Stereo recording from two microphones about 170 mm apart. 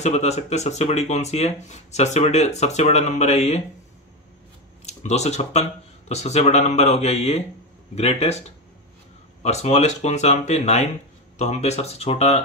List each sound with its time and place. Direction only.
0.0 s speech: 40° left (ahead or behind)
4.8 s speech: 40° left (ahead or behind)